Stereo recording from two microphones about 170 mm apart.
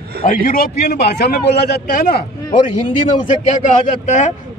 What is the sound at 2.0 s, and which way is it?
Speech, 60° left (ahead or behind).